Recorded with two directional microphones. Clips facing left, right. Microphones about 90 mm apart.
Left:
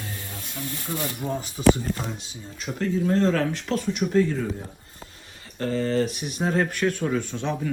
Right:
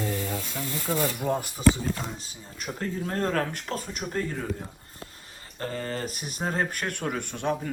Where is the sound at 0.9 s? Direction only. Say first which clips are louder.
Right 3 dB; 50° right (ahead or behind).